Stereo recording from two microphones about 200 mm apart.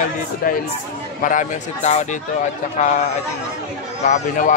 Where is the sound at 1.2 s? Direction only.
40° left (ahead or behind).